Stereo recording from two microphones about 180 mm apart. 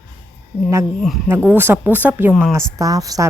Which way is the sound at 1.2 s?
10° right (ahead or behind).